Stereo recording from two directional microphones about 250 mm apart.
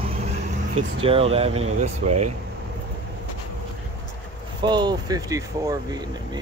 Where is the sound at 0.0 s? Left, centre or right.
Right.